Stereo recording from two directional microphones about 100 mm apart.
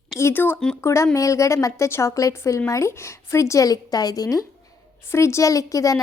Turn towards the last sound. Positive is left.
turn(degrees=35)  # may be behind; listen again after turning